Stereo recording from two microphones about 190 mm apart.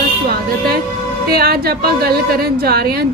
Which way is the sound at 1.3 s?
55° right (ahead or behind).